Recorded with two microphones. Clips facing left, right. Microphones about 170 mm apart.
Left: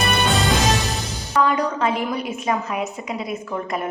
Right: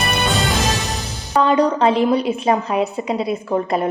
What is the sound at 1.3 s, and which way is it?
A woman's voice, 30° right (ahead or behind).